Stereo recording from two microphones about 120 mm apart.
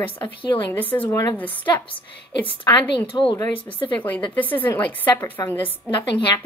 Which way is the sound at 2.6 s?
40° left (ahead or behind).